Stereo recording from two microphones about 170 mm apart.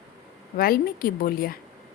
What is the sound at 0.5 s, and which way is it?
Speech, 60° left (ahead or behind).